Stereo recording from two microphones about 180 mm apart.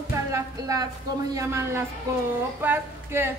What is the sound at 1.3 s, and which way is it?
A woman's voice, 15° right (ahead or behind).